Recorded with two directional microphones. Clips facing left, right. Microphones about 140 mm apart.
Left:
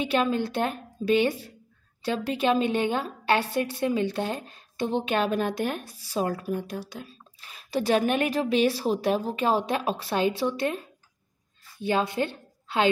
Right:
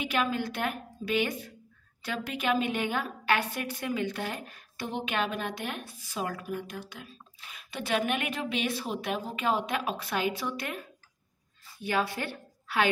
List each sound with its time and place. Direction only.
0.0 s a woman's voice: 30° left (ahead or behind)
5.1 s a woman's voice: 40° left (ahead or behind)